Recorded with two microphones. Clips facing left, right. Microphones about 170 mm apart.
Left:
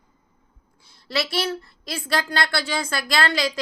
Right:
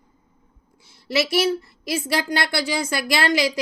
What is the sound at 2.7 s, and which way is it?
Speech, 20° right (ahead or behind).